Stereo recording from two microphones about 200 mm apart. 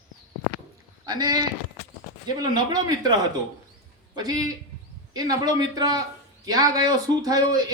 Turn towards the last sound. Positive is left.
turn(degrees=-20)  # may be behind; listen again after turning